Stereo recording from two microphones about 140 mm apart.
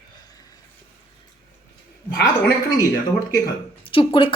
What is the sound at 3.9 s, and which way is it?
Speech, 40° left (ahead or behind).